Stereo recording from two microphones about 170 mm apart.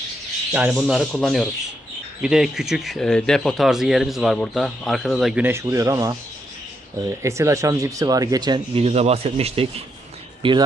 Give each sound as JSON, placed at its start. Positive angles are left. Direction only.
{"t": 0.5, "sound": "speech", "side_deg": -10}
{"t": 7.2, "sound": "speech", "side_deg": -15}